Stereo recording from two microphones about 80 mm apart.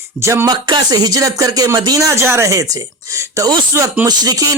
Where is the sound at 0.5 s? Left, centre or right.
Right.